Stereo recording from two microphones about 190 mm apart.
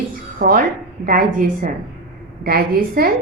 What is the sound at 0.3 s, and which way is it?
A woman's voice, 50° right (ahead or behind).